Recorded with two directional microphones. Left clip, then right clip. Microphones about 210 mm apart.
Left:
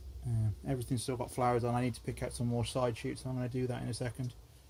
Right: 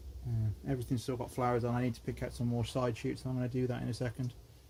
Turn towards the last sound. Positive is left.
turn(degrees=0)  # may be behind; listen again after turning